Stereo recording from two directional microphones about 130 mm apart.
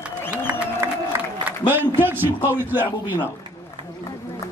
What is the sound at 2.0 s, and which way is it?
Speech, 15° right (ahead or behind).